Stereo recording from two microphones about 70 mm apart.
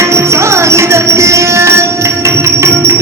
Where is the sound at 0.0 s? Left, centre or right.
Right.